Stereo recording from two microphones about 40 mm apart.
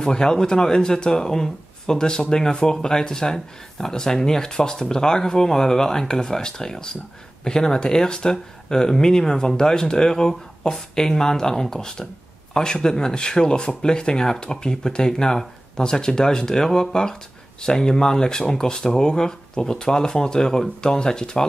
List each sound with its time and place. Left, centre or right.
0.0 s speech: centre